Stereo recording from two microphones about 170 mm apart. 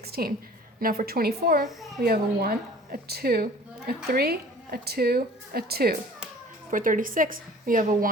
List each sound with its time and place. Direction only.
0.1 s a woman's voice: 65° right (ahead or behind)
6.7 s a woman's voice: 50° right (ahead or behind)